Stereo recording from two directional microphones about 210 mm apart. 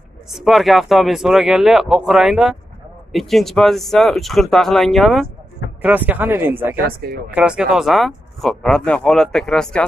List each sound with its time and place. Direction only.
0.3 s speech: centre (ahead or behind)
6.8 s speech: 45° right (ahead or behind)
7.2 s speech: 5° right (ahead or behind)